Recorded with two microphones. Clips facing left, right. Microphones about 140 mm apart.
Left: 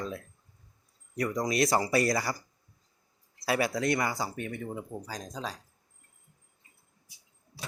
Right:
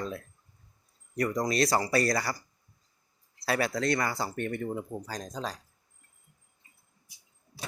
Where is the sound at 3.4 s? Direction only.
15° left (ahead or behind).